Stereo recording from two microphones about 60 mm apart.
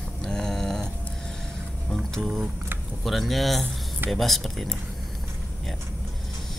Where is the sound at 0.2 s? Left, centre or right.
Centre.